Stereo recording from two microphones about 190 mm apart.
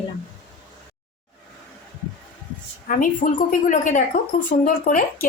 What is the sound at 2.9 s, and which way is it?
Speech, 45° left (ahead or behind).